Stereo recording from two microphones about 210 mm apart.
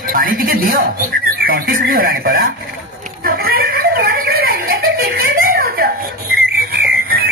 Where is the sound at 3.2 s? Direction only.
45° right (ahead or behind).